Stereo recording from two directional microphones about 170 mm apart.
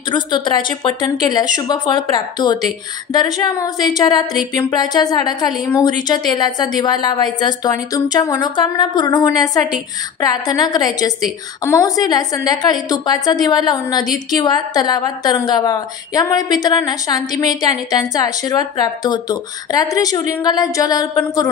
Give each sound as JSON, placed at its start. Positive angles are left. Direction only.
{"t": 0.1, "sound": "a woman's voice", "side_deg": 25}